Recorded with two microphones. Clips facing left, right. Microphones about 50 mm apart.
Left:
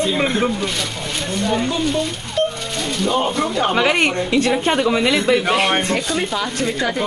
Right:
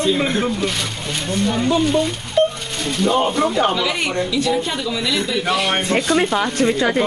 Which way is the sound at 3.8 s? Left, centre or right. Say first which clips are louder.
Left 4 dB; left.